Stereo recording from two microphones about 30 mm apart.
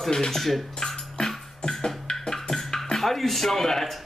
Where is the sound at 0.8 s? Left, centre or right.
Centre.